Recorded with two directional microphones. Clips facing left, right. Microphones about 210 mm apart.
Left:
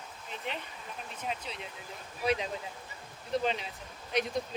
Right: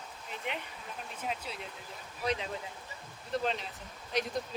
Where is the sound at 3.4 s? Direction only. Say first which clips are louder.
Left 1 dB; centre (ahead or behind).